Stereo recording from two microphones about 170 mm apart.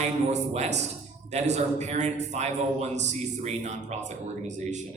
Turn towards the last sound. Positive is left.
turn(degrees=-45)  # may be behind; listen again after turning